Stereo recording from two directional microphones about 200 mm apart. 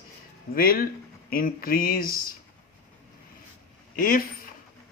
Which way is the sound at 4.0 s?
45° left (ahead or behind).